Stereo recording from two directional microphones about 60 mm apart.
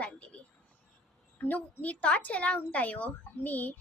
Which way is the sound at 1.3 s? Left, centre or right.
Left.